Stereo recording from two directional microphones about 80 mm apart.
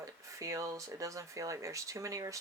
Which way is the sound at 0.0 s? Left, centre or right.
Right.